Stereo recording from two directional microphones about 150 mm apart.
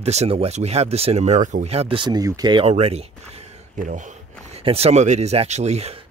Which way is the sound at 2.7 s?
45° right (ahead or behind).